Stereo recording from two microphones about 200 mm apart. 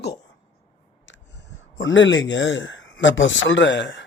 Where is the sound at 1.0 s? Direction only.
60° left (ahead or behind).